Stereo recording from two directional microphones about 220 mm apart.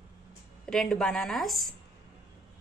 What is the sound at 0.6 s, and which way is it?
A woman's voice, 5° left (ahead or behind).